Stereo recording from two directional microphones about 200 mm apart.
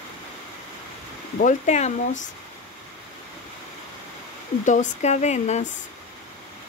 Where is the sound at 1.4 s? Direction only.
35° left (ahead or behind).